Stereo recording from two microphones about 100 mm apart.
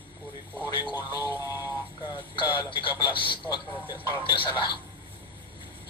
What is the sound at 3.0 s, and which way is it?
Speech, 60° left (ahead or behind).